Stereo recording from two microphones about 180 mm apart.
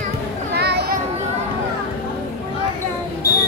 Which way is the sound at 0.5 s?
65° right (ahead or behind).